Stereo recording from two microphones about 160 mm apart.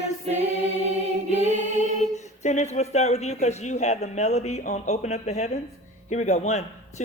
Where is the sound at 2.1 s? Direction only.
45° left (ahead or behind).